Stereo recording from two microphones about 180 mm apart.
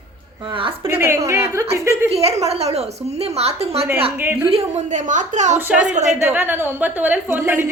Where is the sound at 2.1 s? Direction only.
35° right (ahead or behind).